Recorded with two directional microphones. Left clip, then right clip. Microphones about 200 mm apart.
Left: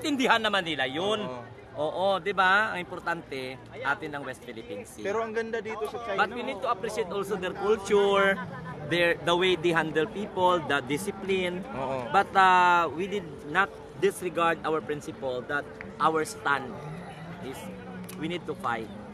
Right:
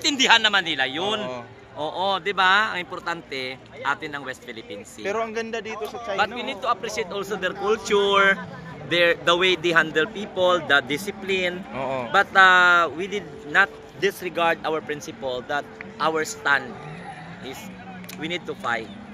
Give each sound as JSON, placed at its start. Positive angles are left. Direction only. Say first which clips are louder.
{"t": 0.0, "sound": "a man's voice", "louder": "right 7 dB", "side_deg": 45}
{"t": 0.7, "sound": "speech", "louder": "right 4 dB", "side_deg": 10}
{"t": 1.2, "sound": "a man's voice", "louder": "right 5 dB", "side_deg": -30}
{"t": 1.9, "sound": "speech", "louder": "right 3 dB", "side_deg": 5}
{"t": 5.0, "sound": "a man's voice", "louder": "right 3 dB", "side_deg": -25}
{"t": 6.1, "sound": "a man's voice", "louder": "right 4 dB", "side_deg": -15}
{"t": 7.6, "sound": "speech", "louder": "right 2 dB", "side_deg": 10}
{"t": 11.8, "sound": "a man's voice", "louder": "right 5 dB", "side_deg": -20}
{"t": 12.1, "sound": "speech", "louder": "right 6 dB", "side_deg": 10}
{"t": 18.2, "sound": "speech", "louder": "right 4 dB", "side_deg": 10}